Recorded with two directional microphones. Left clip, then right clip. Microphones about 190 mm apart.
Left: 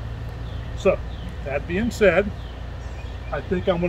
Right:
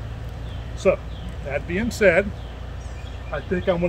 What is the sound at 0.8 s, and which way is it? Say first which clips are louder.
Speech: right 1 dB; 10° right (ahead or behind).